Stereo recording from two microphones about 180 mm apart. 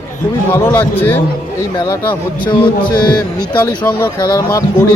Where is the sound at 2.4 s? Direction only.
25° left (ahead or behind).